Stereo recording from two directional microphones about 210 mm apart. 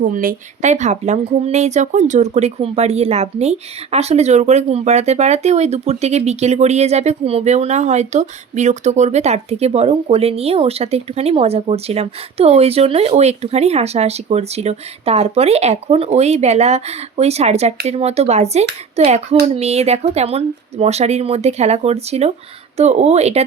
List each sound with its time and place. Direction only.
0.0 s a woman's voice: 40° right (ahead or behind)